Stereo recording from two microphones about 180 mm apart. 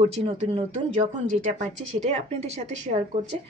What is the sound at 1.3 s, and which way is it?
A woman's voice, 45° right (ahead or behind).